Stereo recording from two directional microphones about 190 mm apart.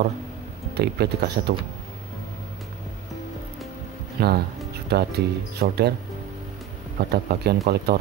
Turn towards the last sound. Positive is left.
turn(degrees=-55)  # may be behind; listen again after turning